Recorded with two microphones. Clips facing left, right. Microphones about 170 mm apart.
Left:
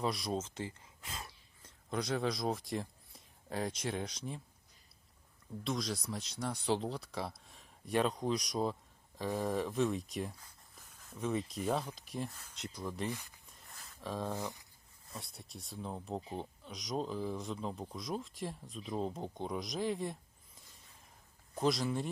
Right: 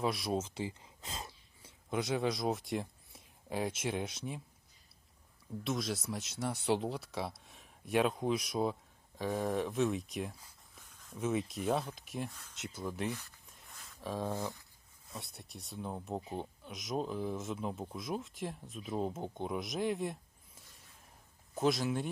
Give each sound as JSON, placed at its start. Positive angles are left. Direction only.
{"t": 0.0, "sound": "speech", "side_deg": 0}
{"t": 1.0, "sound": "speech", "side_deg": -25}
{"t": 1.6, "sound": "speech", "side_deg": -5}
{"t": 5.6, "sound": "speech", "side_deg": 0}
{"t": 13.5, "sound": "a sound", "side_deg": 0}
{"t": 15.0, "sound": "speech", "side_deg": 0}
{"t": 21.5, "sound": "speech", "side_deg": 0}